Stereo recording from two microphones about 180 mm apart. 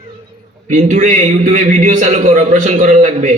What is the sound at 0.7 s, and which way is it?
A man's voice, 45° right (ahead or behind).